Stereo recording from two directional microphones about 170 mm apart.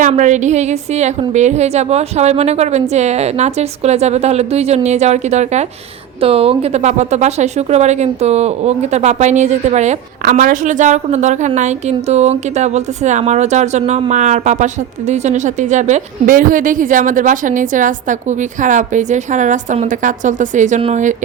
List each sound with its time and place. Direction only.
0.0 s a woman's voice: 45° right (ahead or behind)